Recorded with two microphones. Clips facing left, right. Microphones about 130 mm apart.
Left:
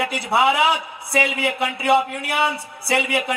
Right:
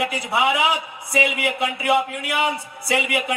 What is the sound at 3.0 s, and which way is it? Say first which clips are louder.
Speech: left 4 dB; 30° left (ahead or behind).